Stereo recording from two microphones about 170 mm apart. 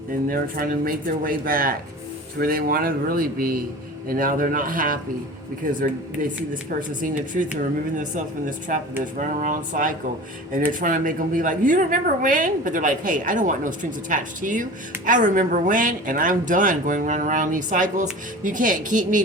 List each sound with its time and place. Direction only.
0.3 s a woman's voice: 55° right (ahead or behind)